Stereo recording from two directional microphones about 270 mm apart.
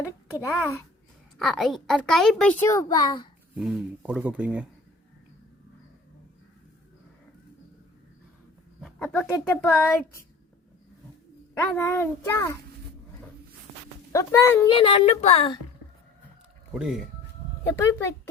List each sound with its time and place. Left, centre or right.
1.4 s a woman's voice: centre
3.5 s a woman's voice: centre
8.8 s speech: centre
11.6 s speech: centre
14.1 s speech: centre
16.7 s a woman's voice: centre
17.6 s speech: centre